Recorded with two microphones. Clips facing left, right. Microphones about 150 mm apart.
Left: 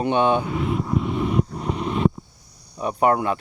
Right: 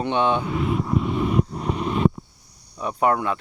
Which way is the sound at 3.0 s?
45° left (ahead or behind).